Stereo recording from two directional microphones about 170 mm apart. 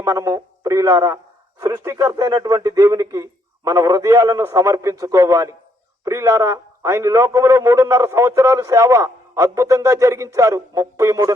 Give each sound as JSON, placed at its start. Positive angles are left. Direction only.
{"t": 0.0, "sound": "a man's voice", "side_deg": -20}